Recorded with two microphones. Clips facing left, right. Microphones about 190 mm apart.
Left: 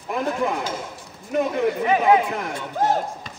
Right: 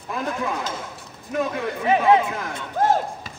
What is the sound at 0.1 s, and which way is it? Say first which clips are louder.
Speech: left 3 dB; 20° left (ahead or behind).